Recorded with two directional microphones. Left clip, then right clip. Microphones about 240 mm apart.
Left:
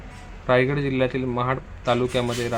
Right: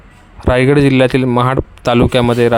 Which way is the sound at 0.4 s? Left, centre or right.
Right.